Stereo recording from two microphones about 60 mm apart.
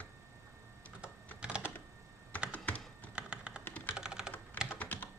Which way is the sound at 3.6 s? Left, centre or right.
Left.